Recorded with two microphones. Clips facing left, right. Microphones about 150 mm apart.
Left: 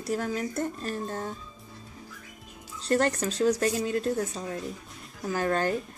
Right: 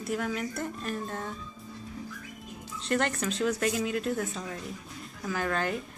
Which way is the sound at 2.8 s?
35° left (ahead or behind).